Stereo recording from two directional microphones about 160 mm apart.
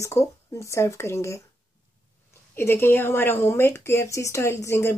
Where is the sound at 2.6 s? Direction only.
15° left (ahead or behind).